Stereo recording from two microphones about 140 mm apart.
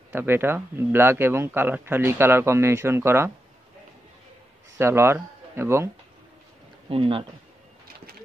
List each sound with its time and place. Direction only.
0.1 s a man's voice: 15° right (ahead or behind)
4.7 s speech: 20° right (ahead or behind)
6.9 s speech: 40° right (ahead or behind)